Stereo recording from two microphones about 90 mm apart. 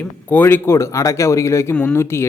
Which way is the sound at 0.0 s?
20° left (ahead or behind).